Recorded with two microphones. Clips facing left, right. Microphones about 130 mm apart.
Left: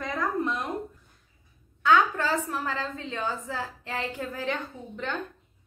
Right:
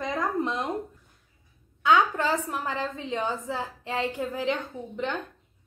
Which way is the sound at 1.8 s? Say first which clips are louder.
Even; 20° right (ahead or behind).